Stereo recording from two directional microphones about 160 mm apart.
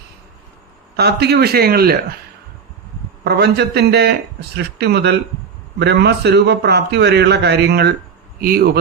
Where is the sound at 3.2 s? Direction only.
90° right.